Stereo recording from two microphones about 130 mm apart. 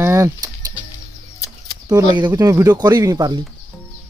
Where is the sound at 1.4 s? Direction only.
30° left (ahead or behind).